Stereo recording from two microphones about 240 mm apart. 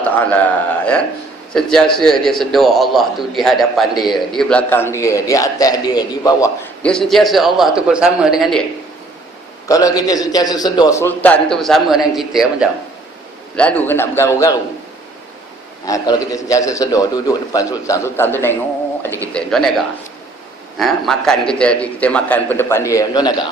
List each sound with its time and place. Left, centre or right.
0.0 s a man's voice: centre
4.0 s a man's voice: centre
4.3 s a man's voice: centre
9.6 s a man's voice: centre
15.9 s a man's voice: centre